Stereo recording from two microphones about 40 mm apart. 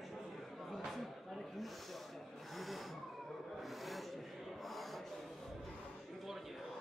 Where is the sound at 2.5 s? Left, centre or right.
Centre.